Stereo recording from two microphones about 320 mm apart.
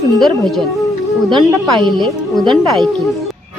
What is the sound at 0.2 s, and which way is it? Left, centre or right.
Speech, centre.